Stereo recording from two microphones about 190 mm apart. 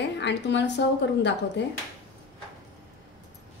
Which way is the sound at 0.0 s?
65° left (ahead or behind).